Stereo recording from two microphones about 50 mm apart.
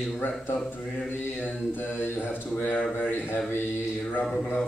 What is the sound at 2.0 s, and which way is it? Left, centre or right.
A man's voice, left.